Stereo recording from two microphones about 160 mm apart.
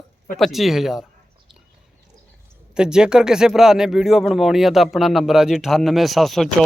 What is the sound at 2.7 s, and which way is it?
Speech, 5° right (ahead or behind).